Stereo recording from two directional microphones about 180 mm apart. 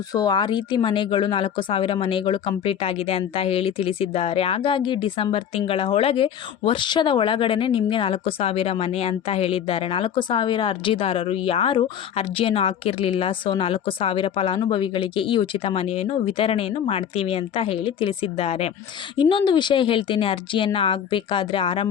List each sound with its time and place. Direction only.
0.1 s speech: 20° left (ahead or behind)